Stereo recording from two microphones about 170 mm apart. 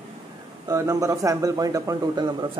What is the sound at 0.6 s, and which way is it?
Speech, 15° right (ahead or behind).